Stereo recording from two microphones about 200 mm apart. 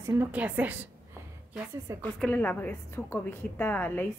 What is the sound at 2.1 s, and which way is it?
A woman's voice, 5° left (ahead or behind).